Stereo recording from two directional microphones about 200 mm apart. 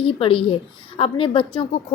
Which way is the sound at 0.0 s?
25° left (ahead or behind).